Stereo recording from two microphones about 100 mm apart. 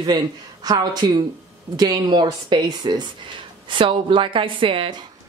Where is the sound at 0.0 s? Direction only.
45° right (ahead or behind); by 5.0 s 60° right (ahead or behind).